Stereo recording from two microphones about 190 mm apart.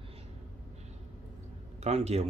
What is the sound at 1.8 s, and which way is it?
Speech, 35° right (ahead or behind).